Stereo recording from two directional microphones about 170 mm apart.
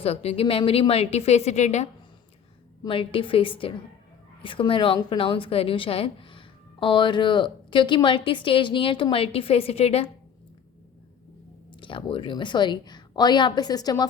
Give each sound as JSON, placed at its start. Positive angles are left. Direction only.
{"t": 0.0, "sound": "speech", "side_deg": 35}
{"t": 2.8, "sound": "speech", "side_deg": 30}
{"t": 11.7, "sound": "a woman's voice", "side_deg": 30}